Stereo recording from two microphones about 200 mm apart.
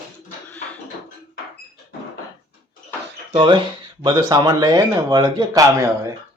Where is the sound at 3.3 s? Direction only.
25° right (ahead or behind).